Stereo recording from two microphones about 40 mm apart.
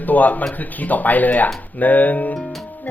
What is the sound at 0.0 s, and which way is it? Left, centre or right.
Speech, left.